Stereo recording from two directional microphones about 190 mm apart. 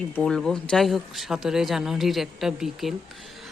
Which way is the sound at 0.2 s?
5° left (ahead or behind).